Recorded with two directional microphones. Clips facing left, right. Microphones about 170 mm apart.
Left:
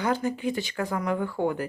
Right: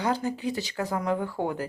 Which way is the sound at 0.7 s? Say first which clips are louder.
Even; 20° right (ahead or behind).